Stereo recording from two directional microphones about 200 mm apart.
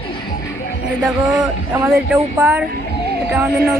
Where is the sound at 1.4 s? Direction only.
5° right (ahead or behind).